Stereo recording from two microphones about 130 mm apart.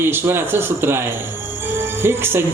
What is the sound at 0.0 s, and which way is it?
Speech, 20° right (ahead or behind).